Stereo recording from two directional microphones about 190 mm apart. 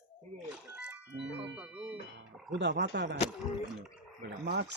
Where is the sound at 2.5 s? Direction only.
65° right (ahead or behind).